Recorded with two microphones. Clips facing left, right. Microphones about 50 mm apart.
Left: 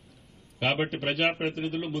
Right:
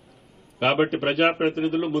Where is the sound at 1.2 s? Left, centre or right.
Centre.